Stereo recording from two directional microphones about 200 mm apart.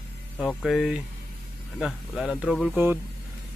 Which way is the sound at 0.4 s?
Centre (ahead or behind).